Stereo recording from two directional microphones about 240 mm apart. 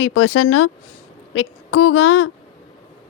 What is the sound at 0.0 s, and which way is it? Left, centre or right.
Speech, left.